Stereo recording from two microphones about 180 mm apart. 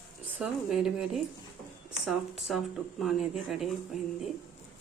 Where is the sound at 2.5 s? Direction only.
Centre (ahead or behind).